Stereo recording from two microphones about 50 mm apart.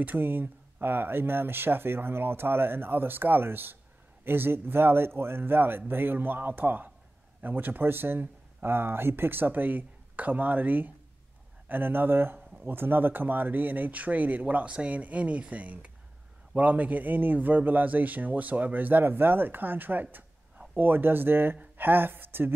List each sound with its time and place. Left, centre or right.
0.0 s speech: right